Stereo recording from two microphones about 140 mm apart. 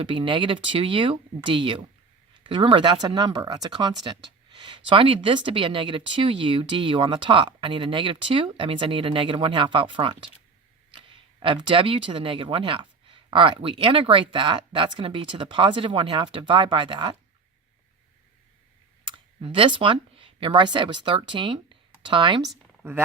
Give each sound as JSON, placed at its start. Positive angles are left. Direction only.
{"t": 0.0, "sound": "speech", "side_deg": -35}
{"t": 19.0, "sound": "speech", "side_deg": -35}